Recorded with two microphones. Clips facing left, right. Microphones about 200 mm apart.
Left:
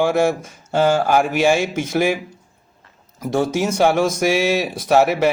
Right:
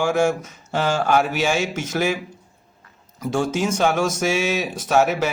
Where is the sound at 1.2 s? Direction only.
55° left (ahead or behind).